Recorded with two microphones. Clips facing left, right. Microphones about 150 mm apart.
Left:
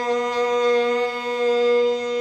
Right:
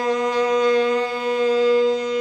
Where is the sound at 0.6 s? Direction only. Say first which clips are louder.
Right 1 dB; 40° left (ahead or behind).